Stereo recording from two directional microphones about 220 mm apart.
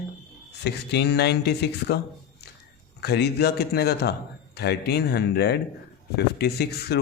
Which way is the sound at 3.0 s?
50° left (ahead or behind).